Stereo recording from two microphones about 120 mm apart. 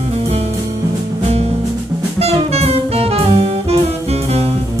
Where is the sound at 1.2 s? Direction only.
55° right (ahead or behind).